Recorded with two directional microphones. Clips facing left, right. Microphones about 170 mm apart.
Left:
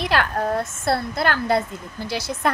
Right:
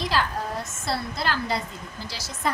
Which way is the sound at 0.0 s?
65° left (ahead or behind).